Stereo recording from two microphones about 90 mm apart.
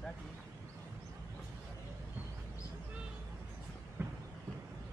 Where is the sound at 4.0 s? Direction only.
25° right (ahead or behind).